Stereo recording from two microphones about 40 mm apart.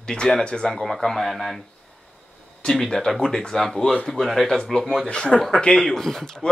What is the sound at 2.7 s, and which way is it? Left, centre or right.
Speech, centre.